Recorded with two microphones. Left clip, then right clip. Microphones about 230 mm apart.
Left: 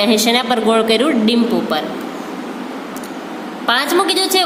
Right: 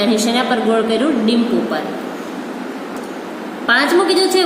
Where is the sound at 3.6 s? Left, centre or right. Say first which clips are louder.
Right 1 dB; left.